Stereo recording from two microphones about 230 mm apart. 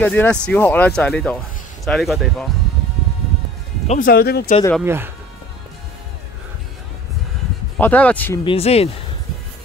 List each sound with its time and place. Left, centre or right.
0.0 s speech: centre
3.8 s speech: left
4.8 s speech: centre
7.8 s speech: centre
8.5 s speech: left